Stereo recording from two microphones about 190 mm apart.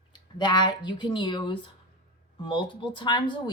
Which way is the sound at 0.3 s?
25° left (ahead or behind).